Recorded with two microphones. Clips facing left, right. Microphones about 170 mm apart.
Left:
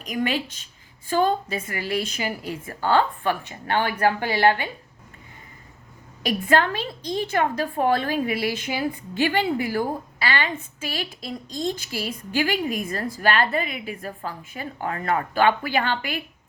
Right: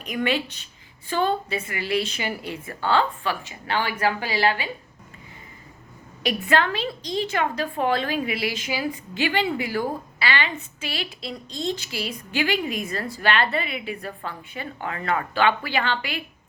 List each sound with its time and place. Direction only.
0.0 s speech: 40° left (ahead or behind); by 4.7 s 55° left (ahead or behind)
6.2 s speech: 45° left (ahead or behind)